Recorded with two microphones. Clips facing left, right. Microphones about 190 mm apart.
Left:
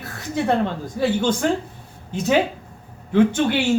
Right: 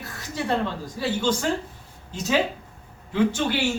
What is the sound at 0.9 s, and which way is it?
A man's voice, 55° left (ahead or behind).